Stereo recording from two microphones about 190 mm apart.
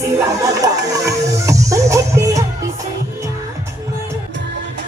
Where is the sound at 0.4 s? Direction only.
20° right (ahead or behind).